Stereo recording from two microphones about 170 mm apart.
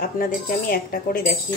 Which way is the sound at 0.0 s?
55° left (ahead or behind).